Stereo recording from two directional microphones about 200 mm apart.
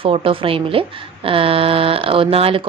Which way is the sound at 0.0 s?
25° right (ahead or behind).